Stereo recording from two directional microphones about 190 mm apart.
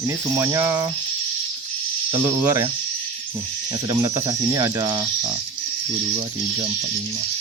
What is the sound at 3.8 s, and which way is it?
Speech, 20° right (ahead or behind).